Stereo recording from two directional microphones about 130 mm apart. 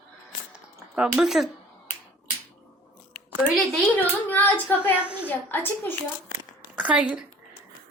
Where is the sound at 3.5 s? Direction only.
Centre (ahead or behind).